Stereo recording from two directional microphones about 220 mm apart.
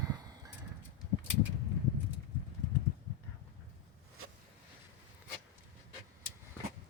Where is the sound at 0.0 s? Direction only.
15° right (ahead or behind).